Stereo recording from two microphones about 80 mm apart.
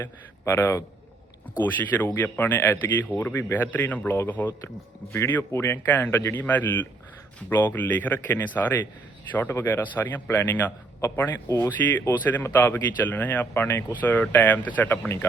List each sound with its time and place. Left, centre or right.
0.0 s a man's voice: left
1.5 s speech: left
11.4 s a man's voice: left
11.8 s speech: left